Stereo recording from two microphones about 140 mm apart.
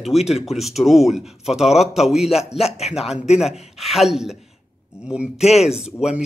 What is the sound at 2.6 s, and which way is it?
Speech, 50° left (ahead or behind).